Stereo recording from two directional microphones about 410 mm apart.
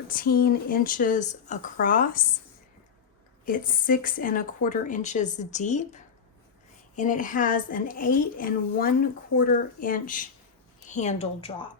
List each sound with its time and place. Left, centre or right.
0.1 s a woman's voice: left
3.4 s a woman's voice: centre